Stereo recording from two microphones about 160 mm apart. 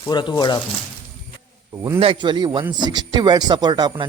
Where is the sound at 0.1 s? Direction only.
30° left (ahead or behind).